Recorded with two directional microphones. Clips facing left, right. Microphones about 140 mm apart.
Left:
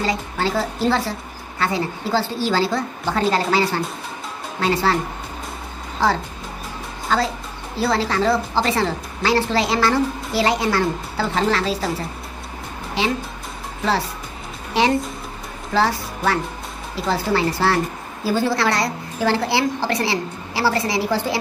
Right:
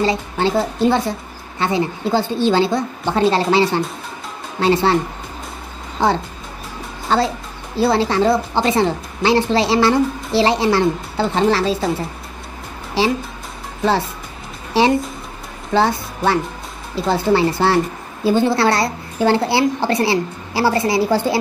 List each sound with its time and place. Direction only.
0.0 s a woman's voice: 25° right (ahead or behind)
6.0 s a woman's voice: 20° right (ahead or behind)
14.7 s a woman's voice: 30° right (ahead or behind)